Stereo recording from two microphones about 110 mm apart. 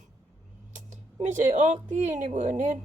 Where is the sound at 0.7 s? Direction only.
90° right.